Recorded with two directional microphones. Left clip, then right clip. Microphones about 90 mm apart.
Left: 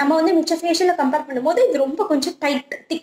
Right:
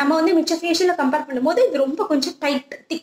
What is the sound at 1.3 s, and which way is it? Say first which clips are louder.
A woman's voice: left 1 dB; 30° left (ahead or behind).